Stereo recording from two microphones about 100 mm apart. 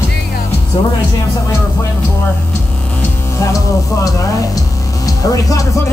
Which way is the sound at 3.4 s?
35° left (ahead or behind).